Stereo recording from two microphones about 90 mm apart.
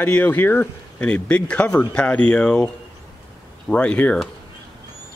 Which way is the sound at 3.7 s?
10° left (ahead or behind).